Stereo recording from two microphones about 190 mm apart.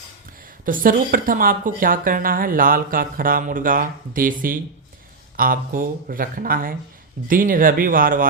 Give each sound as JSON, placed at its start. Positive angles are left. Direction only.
{"t": 0.6, "sound": "a woman's voice", "side_deg": -45}